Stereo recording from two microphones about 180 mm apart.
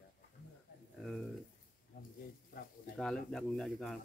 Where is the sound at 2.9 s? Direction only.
5° left (ahead or behind).